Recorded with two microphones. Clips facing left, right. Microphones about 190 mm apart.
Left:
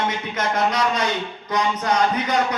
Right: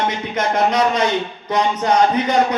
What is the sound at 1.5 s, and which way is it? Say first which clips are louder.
A man's voice: right 4 dB; 30° right (ahead or behind).